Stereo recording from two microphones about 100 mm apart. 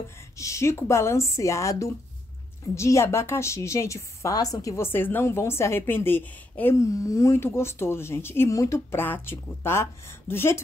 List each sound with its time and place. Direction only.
0.4 s a woman's voice: 30° left (ahead or behind)
6.8 s a woman's voice: 35° left (ahead or behind)
9.0 s a woman's voice: 20° left (ahead or behind)